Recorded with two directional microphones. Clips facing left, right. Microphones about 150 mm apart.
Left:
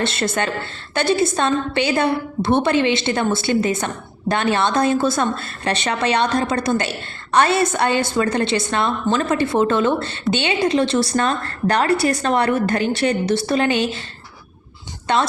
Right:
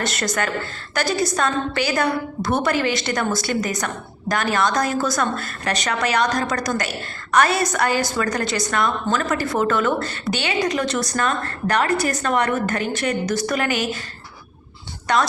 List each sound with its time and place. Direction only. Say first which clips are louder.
0.0 s a woman's voice: left 3 dB; 25° left (ahead or behind)
15.0 s speech: left 1 dB; 25° left (ahead or behind)